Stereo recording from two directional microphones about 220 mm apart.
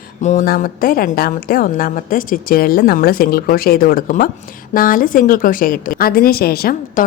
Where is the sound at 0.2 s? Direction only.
35° left (ahead or behind).